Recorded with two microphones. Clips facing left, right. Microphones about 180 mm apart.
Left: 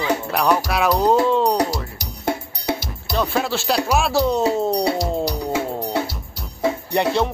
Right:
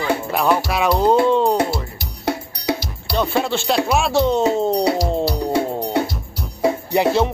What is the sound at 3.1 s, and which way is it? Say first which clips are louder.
Music: right 2 dB; centre (ahead or behind).